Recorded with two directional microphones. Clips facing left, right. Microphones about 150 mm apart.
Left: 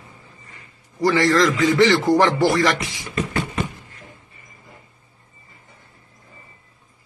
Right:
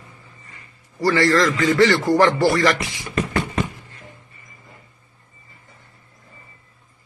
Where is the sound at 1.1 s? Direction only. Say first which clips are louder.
Even; 15° left (ahead or behind).